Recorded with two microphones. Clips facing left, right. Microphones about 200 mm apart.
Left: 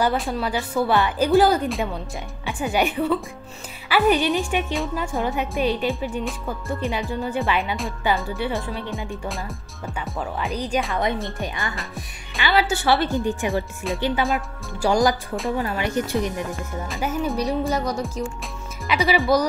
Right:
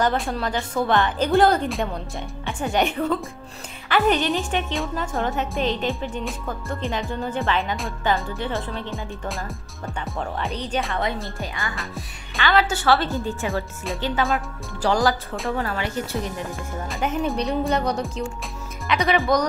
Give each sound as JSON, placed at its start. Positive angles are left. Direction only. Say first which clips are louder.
{"t": 0.0, "sound": "speech", "louder": "even", "side_deg": 5}
{"t": 7.7, "sound": "speech", "louder": "even", "side_deg": 0}
{"t": 11.3, "sound": "speech", "louder": "left 2 dB", "side_deg": 20}
{"t": 16.9, "sound": "speech", "louder": "right 1 dB", "side_deg": 5}